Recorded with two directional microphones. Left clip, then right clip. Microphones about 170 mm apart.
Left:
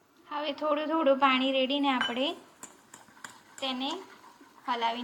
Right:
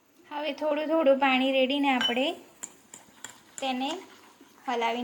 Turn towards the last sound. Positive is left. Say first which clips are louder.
# right 2 dB
turn(degrees=-65)  # may be behind; listen again after turning